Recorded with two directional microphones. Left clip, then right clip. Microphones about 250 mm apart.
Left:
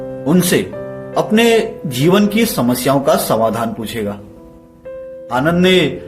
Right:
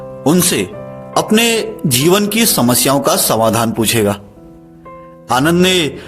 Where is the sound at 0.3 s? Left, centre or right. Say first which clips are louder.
Right 1 dB; right.